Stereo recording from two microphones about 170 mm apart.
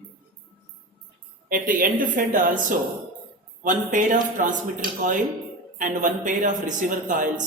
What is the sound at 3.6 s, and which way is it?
Speech, 50° right (ahead or behind).